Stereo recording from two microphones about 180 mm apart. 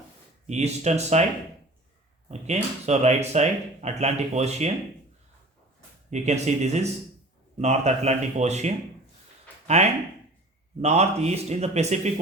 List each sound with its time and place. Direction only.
0.4 s speech: 35° right (ahead or behind)
2.3 s speech: 35° right (ahead or behind)
6.1 s speech: 40° right (ahead or behind)